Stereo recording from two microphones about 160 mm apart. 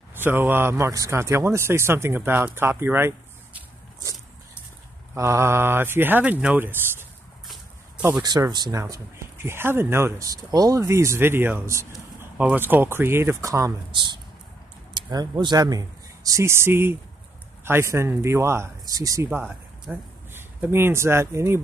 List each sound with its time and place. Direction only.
0.1 s speech: 15° right (ahead or behind)
5.1 s speech: 15° right (ahead or behind)
8.2 s speech: 25° right (ahead or behind)